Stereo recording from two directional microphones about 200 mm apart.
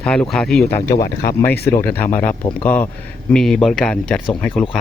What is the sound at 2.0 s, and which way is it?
Speech, 10° left (ahead or behind).